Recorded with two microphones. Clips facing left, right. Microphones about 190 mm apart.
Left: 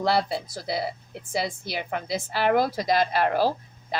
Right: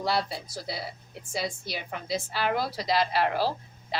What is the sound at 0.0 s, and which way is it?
Speech, 60° left (ahead or behind).